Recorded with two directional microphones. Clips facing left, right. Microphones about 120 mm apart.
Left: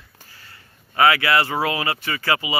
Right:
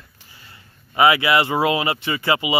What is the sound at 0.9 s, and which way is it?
Speech, 20° right (ahead or behind).